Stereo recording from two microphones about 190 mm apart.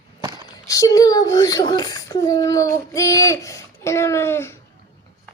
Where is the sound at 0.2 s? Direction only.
25° right (ahead or behind).